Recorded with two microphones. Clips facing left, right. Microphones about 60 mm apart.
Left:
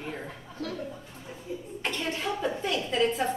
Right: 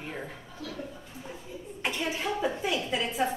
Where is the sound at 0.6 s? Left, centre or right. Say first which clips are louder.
Left 5 dB; left.